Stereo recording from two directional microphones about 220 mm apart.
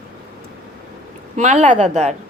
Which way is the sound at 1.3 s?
30° right (ahead or behind).